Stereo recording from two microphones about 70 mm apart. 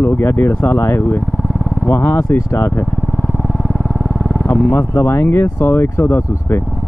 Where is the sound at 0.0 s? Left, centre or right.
Left.